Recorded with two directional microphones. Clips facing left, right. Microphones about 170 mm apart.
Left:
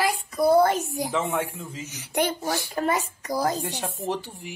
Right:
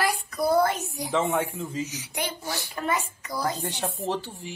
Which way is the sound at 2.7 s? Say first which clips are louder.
Left 1 dB; 40° left (ahead or behind).